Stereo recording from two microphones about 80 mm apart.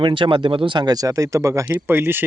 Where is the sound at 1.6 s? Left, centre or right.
Right.